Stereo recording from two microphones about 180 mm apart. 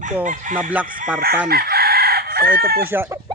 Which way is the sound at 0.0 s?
45° right (ahead or behind).